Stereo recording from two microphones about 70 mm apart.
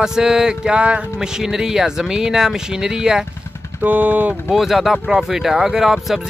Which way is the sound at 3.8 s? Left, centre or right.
Right.